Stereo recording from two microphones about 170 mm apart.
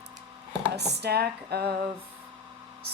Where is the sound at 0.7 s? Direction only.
75° right (ahead or behind).